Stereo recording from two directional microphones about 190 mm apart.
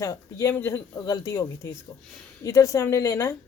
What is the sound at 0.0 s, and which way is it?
Speech, 15° left (ahead or behind).